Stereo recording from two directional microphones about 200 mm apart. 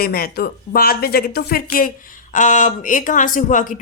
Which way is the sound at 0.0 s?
50° left (ahead or behind).